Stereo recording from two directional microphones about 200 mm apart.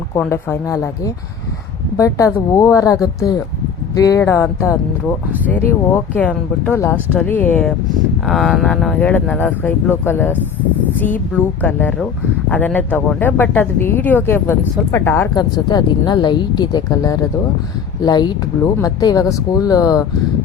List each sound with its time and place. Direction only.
0.1 s speech: 10° left (ahead or behind)